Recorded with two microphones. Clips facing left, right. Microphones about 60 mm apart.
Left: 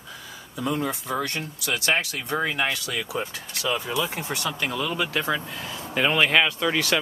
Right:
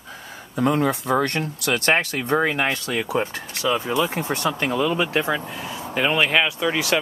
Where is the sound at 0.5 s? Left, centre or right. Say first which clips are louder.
Right 7 dB; right.